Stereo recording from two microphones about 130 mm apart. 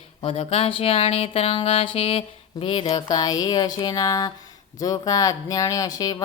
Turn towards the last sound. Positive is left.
turn(degrees=30)  # may be behind; listen again after turning